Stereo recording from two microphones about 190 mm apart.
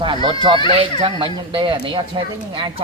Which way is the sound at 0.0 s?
25° right (ahead or behind).